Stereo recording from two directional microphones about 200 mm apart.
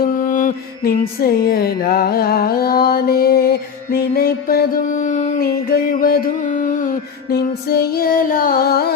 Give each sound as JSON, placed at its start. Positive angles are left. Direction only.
{"t": 0.0, "sound": "music", "side_deg": 40}